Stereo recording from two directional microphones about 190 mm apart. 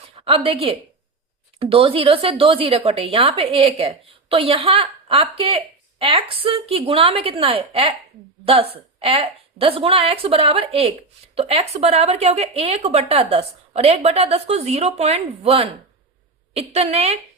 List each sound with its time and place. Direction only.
0.2 s a woman's voice: 30° right (ahead or behind)